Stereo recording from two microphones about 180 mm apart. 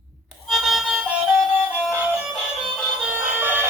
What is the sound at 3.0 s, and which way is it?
Bagpipes, 10° right (ahead or behind).